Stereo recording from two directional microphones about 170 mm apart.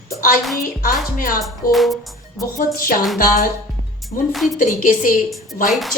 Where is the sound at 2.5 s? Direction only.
55° left (ahead or behind).